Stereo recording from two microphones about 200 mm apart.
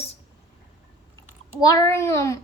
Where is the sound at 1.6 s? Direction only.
15° left (ahead or behind).